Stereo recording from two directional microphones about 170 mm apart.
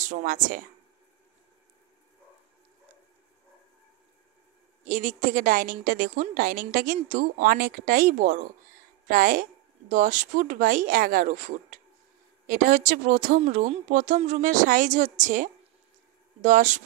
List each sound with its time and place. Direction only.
0.0 s a woman's voice: 50° right (ahead or behind)
4.8 s a woman's voice: 45° right (ahead or behind)